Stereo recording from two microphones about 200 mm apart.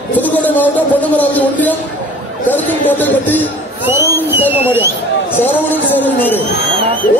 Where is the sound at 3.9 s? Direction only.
10° right (ahead or behind).